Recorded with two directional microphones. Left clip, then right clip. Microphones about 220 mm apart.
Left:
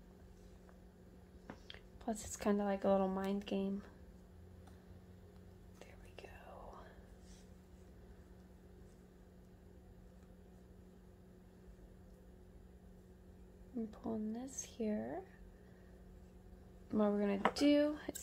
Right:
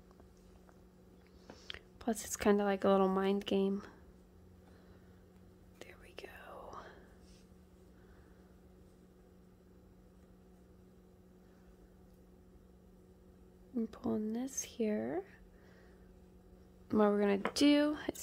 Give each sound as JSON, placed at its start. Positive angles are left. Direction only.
{"t": 1.7, "sound": "speech", "side_deg": -45}
{"t": 5.8, "sound": "whispering", "side_deg": -45}
{"t": 13.7, "sound": "speech", "side_deg": -45}
{"t": 16.9, "sound": "speech", "side_deg": -45}